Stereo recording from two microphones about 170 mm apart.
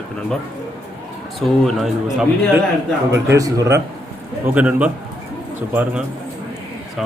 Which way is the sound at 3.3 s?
20° right (ahead or behind).